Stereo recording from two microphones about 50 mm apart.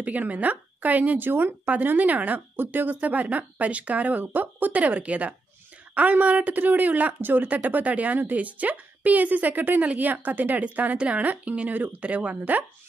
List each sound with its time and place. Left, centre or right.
0.0 s speech: right
1.7 s speech: right